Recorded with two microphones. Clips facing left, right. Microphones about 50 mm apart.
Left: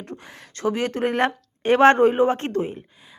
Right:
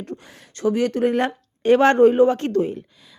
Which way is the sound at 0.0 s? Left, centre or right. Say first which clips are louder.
Right 3 dB; left.